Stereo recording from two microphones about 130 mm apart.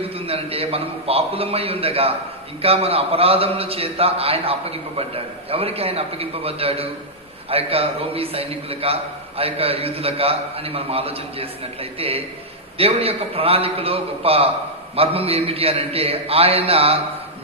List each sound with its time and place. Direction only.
0.2 s a man's voice: 50° right (ahead or behind)